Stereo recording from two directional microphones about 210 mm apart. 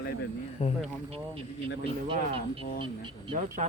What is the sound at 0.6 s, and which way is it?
Speech, 30° left (ahead or behind).